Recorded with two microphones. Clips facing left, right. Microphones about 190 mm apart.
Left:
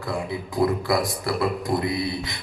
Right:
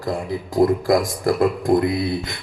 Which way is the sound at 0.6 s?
45° right (ahead or behind).